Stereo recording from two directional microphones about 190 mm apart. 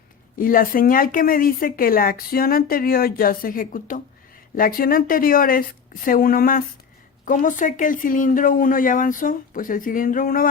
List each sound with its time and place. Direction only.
0.3 s a woman's voice: 50° left (ahead or behind)